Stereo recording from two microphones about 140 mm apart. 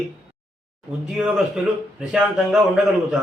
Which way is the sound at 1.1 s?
5° right (ahead or behind).